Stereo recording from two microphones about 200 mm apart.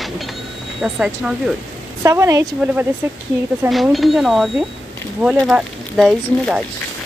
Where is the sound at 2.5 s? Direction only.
5° right (ahead or behind).